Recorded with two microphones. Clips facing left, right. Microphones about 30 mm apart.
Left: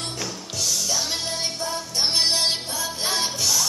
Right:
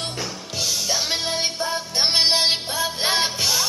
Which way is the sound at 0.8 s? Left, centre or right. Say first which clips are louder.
Right 3 dB; right.